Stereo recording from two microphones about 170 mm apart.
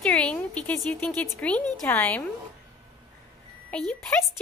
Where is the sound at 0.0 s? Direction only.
5° left (ahead or behind).